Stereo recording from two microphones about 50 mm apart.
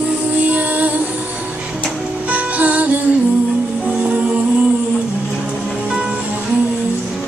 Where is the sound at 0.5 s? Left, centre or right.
Right.